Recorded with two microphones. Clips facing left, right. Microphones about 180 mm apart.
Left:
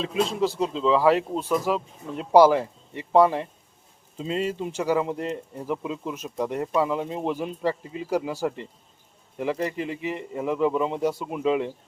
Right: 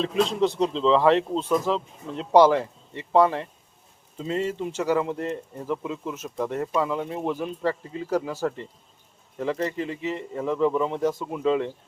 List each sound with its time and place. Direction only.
0.0 s speech: 5° left (ahead or behind)